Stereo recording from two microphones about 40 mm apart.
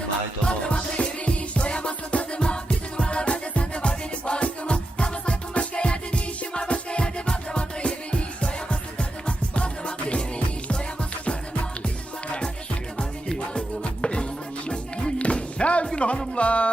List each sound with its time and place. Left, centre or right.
0.4 s music: left
13.0 s music: left